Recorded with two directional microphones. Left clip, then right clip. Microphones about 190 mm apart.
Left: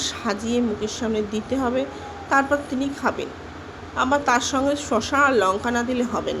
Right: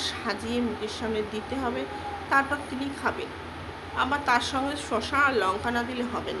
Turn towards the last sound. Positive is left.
turn(degrees=35)  # may be behind; listen again after turning